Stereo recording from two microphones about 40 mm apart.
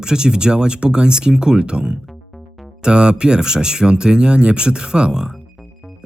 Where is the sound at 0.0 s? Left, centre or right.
Centre.